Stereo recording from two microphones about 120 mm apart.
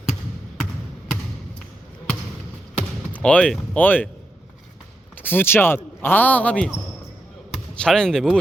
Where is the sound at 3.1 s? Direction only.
10° left (ahead or behind).